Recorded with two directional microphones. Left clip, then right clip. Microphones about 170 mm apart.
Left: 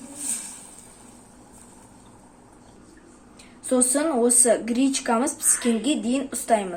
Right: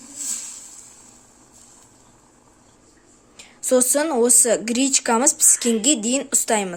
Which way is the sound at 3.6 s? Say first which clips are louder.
Right 4 dB; 70° right (ahead or behind).